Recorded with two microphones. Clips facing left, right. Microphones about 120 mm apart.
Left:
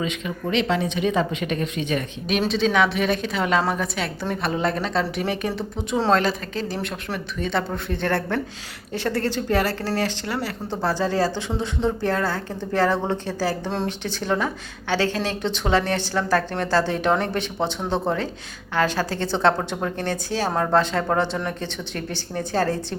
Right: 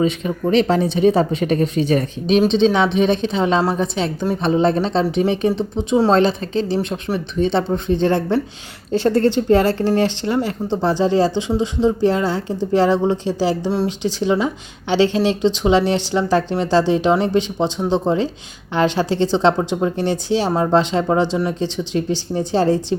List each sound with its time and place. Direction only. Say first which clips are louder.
0.0 s speech: right 8 dB; 35° right (ahead or behind)
2.5 s speech: right 5 dB; 25° right (ahead or behind)
8.9 s speech: right 9 dB; 30° right (ahead or behind)